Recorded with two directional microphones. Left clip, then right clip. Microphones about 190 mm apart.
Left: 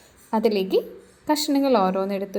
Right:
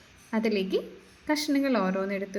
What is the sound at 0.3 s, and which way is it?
A woman's voice, 10° left (ahead or behind).